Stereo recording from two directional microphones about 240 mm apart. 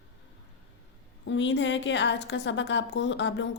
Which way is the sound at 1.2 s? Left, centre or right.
Left.